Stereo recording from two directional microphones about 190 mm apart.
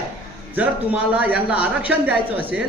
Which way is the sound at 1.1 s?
5° right (ahead or behind).